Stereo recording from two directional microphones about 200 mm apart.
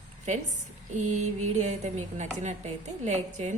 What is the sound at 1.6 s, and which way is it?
A woman's voice, 35° right (ahead or behind).